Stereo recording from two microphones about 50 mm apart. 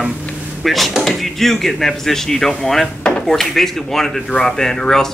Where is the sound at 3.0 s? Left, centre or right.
Left.